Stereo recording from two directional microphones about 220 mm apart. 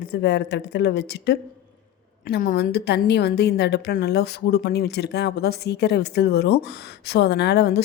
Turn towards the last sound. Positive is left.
turn(degrees=50)  # may be behind; listen again after turning